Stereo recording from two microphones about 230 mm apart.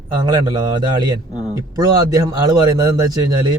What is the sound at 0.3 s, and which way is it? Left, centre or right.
A man's voice, centre.